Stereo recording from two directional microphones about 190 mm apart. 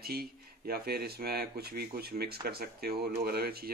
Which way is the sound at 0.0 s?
55° right (ahead or behind).